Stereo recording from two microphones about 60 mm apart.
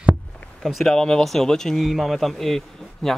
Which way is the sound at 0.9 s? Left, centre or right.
Centre.